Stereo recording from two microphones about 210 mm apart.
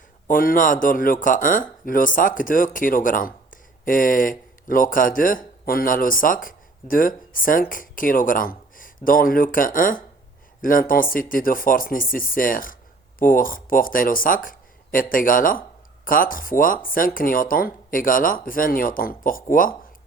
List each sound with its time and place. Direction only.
0.3 s speech: 40° left (ahead or behind)